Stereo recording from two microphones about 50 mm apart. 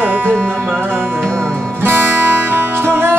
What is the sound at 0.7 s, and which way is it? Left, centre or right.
Music, right.